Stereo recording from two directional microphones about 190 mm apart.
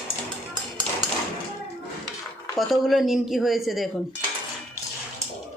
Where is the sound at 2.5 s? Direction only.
Centre (ahead or behind).